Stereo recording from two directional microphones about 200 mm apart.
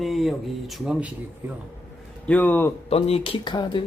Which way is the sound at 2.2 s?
10° left (ahead or behind).